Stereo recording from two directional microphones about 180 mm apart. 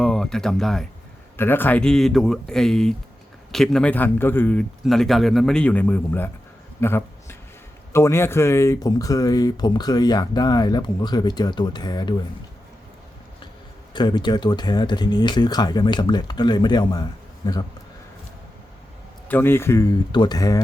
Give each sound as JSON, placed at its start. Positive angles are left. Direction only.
{"t": 0.0, "sound": "speech", "side_deg": 0}
{"t": 1.4, "sound": "a man's voice", "side_deg": 10}
{"t": 6.7, "sound": "a sound", "side_deg": 15}
{"t": 7.9, "sound": "speech", "side_deg": 15}
{"t": 13.9, "sound": "speech", "side_deg": 25}
{"t": 19.3, "sound": "speech", "side_deg": 10}